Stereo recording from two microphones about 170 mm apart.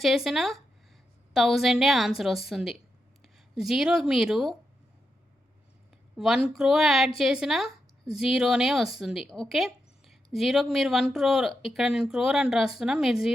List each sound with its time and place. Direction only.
0.0 s speech: centre (ahead or behind)
6.1 s speech: 5° right (ahead or behind)